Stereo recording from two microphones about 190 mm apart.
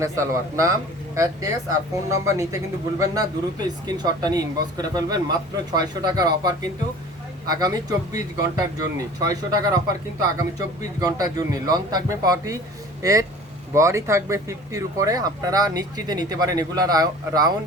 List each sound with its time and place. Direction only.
0.0 s a man's voice: 15° right (ahead or behind)